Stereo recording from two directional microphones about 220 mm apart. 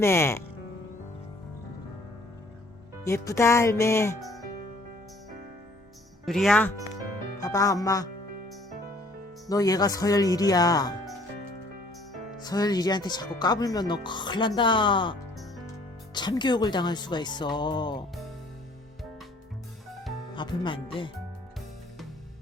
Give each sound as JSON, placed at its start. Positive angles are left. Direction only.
{"t": 0.0, "sound": "speech", "side_deg": 10}
{"t": 3.0, "sound": "speech", "side_deg": 15}
{"t": 6.2, "sound": "speech", "side_deg": 0}
{"t": 7.3, "sound": "speech", "side_deg": 15}
{"t": 9.5, "sound": "speech", "side_deg": 15}
{"t": 12.4, "sound": "speech", "side_deg": 20}
{"t": 20.3, "sound": "speech", "side_deg": 20}